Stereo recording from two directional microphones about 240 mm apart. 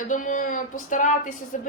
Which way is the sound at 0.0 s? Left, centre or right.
Left.